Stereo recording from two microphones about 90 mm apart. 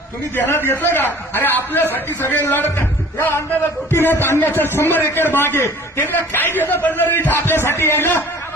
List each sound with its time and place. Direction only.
0.3 s a man's voice: 25° left (ahead or behind)